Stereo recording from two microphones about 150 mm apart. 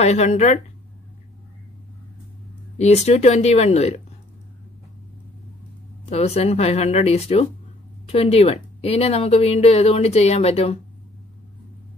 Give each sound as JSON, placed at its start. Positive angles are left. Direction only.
{"t": 0.0, "sound": "speech", "side_deg": 45}
{"t": 2.8, "sound": "speech", "side_deg": 45}
{"t": 6.0, "sound": "speech", "side_deg": 45}